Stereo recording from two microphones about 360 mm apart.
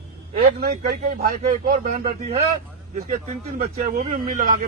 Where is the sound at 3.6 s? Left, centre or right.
Right.